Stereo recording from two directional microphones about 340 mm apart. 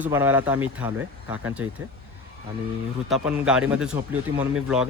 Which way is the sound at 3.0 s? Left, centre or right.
Centre.